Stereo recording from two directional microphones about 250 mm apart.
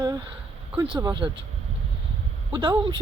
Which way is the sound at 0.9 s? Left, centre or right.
Centre.